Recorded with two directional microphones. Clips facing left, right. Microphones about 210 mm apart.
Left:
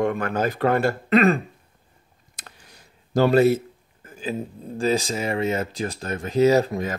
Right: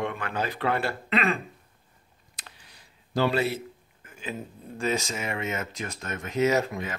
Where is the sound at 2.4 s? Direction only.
45° left (ahead or behind).